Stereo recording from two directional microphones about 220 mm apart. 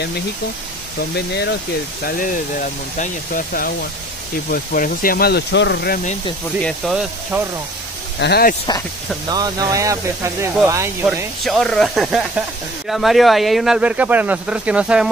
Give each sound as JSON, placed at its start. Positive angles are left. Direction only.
{"t": 1.1, "sound": "speech", "side_deg": 50}
{"t": 2.0, "sound": "speech", "side_deg": 40}
{"t": 6.6, "sound": "speech", "side_deg": 0}
{"t": 8.2, "sound": "speech", "side_deg": 45}
{"t": 9.3, "sound": "speech", "side_deg": -15}
{"t": 11.4, "sound": "speech", "side_deg": 0}